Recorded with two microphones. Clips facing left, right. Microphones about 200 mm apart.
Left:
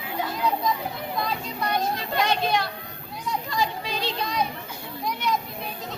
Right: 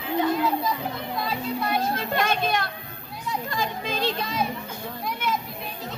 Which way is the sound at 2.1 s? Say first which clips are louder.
Left 2 dB; 50° right (ahead or behind).